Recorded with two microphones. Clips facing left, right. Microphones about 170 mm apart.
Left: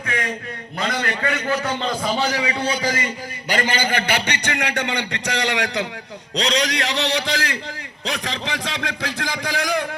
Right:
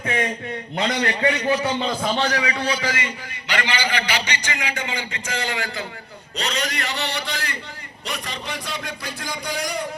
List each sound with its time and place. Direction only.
0.0 s a man's voice: 30° right (ahead or behind)
2.0 s a man's voice: 5° left (ahead or behind)
2.3 s a man's voice: 25° left (ahead or behind); by 5.8 s 80° left
6.3 s a man's voice: 90° left